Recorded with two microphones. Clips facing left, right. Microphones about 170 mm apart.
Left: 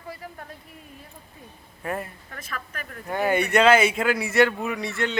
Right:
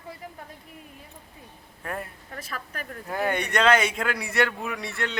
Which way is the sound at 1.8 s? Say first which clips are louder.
Left 4 dB; 5° left (ahead or behind).